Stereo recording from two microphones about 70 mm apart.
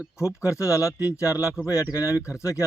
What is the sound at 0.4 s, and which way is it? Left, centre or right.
Speech, left.